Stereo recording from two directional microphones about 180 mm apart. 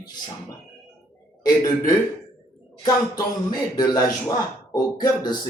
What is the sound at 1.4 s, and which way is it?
Speech, 20° left (ahead or behind).